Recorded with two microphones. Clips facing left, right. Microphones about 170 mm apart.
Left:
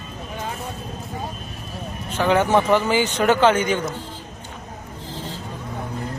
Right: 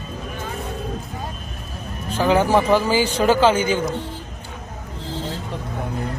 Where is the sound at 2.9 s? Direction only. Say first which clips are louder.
Right 1 dB; 30° right (ahead or behind).